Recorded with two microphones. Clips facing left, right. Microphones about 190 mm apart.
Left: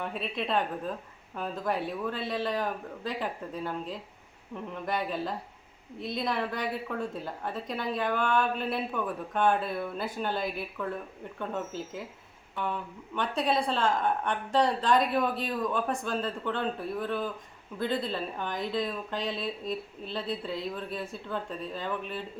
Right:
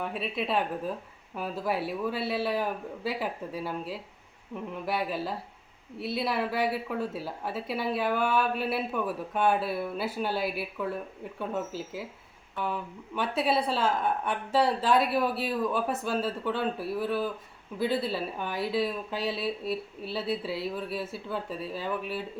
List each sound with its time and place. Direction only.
0.0 s a woman's voice: 5° right (ahead or behind)